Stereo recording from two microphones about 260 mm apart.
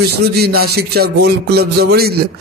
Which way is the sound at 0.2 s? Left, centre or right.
Right.